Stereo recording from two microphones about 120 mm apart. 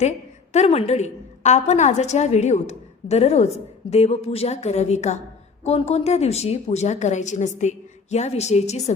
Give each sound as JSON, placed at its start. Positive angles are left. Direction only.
{"t": 0.5, "sound": "a woman's voice", "side_deg": 65}
{"t": 5.6, "sound": "a woman's voice", "side_deg": 60}